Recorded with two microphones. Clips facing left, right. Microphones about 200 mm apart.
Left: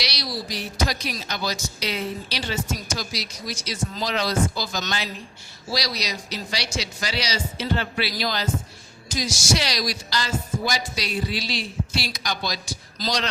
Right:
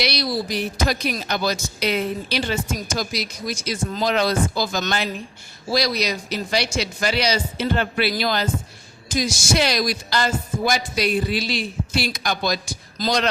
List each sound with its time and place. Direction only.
0.0 s speech: 55° right (ahead or behind)